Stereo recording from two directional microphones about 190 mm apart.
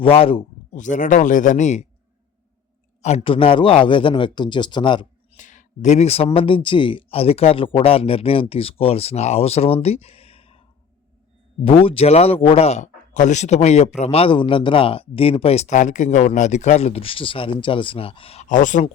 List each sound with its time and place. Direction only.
0.0 s a man's voice: 30° left (ahead or behind)
0.8 s speech: 40° left (ahead or behind)
3.0 s a man's voice: 30° left (ahead or behind)
5.4 s speech: 40° left (ahead or behind)
11.6 s speech: 30° left (ahead or behind)